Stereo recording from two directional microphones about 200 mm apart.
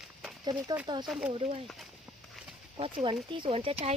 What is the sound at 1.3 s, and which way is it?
Speech, 30° right (ahead or behind).